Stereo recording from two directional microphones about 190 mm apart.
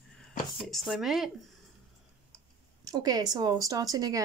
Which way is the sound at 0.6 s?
Centre (ahead or behind).